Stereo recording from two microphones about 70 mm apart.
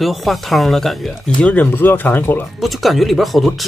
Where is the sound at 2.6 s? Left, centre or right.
Centre.